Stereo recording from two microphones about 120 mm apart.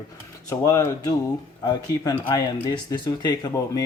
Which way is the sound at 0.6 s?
25° left (ahead or behind).